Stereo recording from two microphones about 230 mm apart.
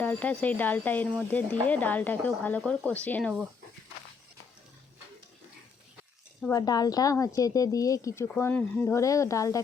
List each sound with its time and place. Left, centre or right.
0.0 s a woman's voice: centre
6.4 s a woman's voice: centre